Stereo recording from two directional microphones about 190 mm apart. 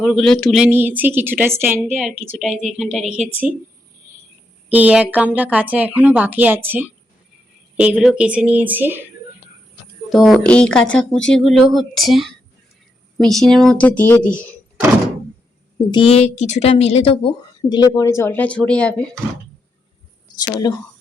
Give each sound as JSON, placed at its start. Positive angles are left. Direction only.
{"t": 0.0, "sound": "speech", "side_deg": 0}
{"t": 4.7, "sound": "speech", "side_deg": -5}
{"t": 7.9, "sound": "speech", "side_deg": -5}
{"t": 10.1, "sound": "speech", "side_deg": 0}
{"t": 15.9, "sound": "speech", "side_deg": 30}
{"t": 20.3, "sound": "speech", "side_deg": 20}